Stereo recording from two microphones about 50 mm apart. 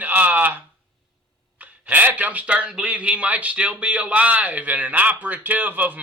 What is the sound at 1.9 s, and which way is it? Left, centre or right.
A man's voice, right.